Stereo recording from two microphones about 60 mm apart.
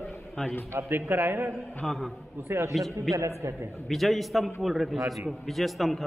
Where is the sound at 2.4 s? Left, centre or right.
Right.